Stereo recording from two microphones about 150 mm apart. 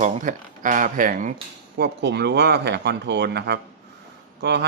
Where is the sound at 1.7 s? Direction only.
90° right.